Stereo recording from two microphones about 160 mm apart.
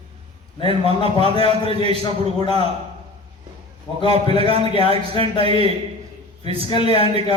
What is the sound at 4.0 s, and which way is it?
A man's voice, 35° right (ahead or behind).